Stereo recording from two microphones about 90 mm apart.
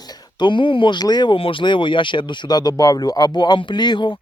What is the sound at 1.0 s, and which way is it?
Speech, 55° left (ahead or behind).